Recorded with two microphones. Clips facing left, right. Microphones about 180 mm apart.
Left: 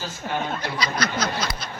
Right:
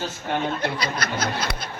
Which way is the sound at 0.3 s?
55° right (ahead or behind).